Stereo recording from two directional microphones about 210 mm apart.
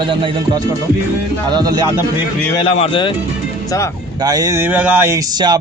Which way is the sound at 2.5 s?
25° left (ahead or behind).